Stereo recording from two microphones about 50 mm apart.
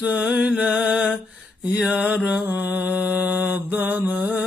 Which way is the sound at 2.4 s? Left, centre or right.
Right.